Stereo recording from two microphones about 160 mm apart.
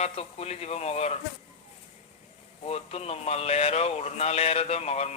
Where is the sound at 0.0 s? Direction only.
40° left (ahead or behind).